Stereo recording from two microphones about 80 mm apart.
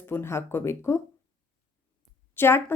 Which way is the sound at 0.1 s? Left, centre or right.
Left.